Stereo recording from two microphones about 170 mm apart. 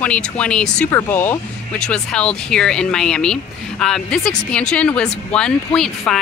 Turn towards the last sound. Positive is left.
turn(degrees=5)  # may be behind; listen again after turning